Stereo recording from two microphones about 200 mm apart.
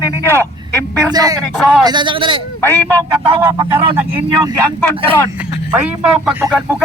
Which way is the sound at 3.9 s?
10° right (ahead or behind).